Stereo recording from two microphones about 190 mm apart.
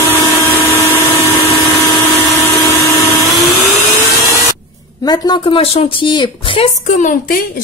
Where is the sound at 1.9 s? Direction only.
Centre (ahead or behind).